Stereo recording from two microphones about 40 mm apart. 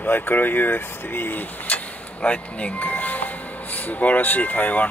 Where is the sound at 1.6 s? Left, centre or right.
Left.